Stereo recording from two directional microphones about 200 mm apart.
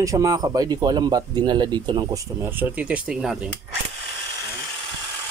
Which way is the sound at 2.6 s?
5° right (ahead or behind).